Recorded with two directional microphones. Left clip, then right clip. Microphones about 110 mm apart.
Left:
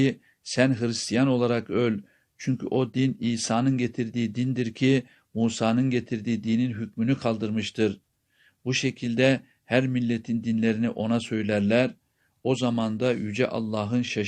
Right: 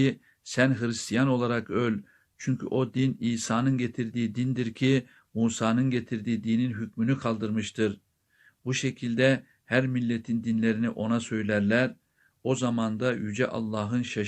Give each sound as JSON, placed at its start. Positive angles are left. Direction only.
{"t": 0.0, "sound": "speech", "side_deg": 15}